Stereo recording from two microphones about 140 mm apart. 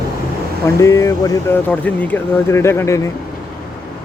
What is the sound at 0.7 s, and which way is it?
Speech, 20° left (ahead or behind).